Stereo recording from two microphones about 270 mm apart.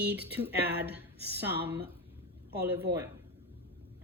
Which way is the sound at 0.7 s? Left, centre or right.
Right.